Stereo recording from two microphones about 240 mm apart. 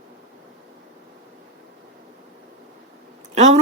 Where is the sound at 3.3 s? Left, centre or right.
Right.